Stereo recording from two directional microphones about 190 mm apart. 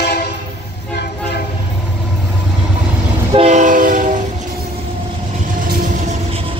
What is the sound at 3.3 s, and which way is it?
Train, 35° right (ahead or behind).